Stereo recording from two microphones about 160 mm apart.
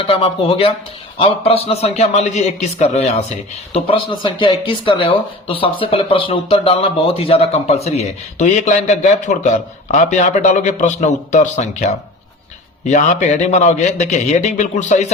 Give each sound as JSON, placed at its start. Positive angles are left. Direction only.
{"t": 0.0, "sound": "a man's voice", "side_deg": 35}